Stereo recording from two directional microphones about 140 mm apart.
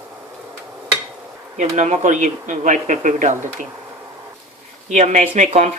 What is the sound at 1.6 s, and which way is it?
Speech, 60° right (ahead or behind).